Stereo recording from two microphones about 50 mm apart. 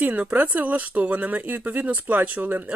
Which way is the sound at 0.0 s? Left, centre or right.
Right.